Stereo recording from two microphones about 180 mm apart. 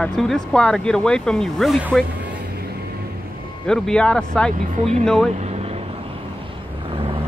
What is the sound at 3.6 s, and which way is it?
Speech, 5° left (ahead or behind).